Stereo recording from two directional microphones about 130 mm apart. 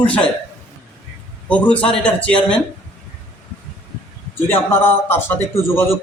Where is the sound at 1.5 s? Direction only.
10° left (ahead or behind).